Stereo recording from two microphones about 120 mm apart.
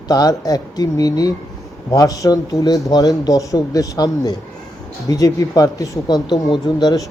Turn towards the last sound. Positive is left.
turn(degrees=35)  # may be behind; listen again after turning